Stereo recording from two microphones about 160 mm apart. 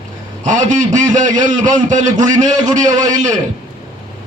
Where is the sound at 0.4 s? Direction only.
55° right (ahead or behind).